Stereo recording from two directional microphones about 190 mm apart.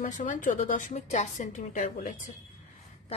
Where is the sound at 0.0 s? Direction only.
40° left (ahead or behind).